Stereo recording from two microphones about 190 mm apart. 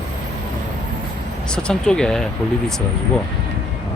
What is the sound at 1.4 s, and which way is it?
Speech, 5° left (ahead or behind).